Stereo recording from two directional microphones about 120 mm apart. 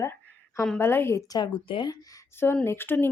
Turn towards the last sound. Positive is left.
turn(degrees=15)  # may be behind; listen again after turning